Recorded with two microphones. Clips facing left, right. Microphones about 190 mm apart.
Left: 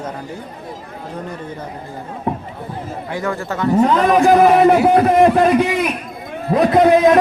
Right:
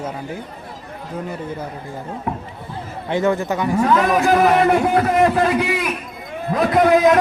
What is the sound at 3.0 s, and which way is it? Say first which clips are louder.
Speech: right 5 dB; 25° right (ahead or behind).